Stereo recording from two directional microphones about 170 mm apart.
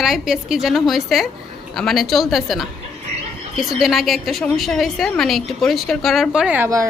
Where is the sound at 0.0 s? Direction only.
Centre (ahead or behind).